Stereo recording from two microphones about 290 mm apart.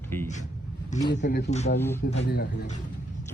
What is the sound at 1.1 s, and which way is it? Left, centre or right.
Speech, left.